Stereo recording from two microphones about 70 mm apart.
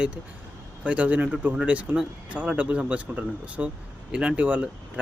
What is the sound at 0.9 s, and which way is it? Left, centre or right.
Speech, centre.